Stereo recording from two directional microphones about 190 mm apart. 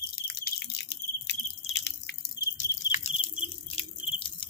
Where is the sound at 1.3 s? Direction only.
65° left (ahead or behind).